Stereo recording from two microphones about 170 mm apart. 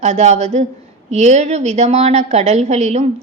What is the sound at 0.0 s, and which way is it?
A woman's voice, 40° right (ahead or behind).